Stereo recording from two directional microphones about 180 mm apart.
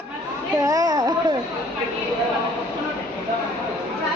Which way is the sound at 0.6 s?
20° right (ahead or behind).